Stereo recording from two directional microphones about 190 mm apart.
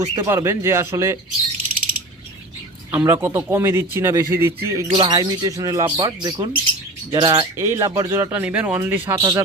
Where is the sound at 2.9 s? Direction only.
10° right (ahead or behind).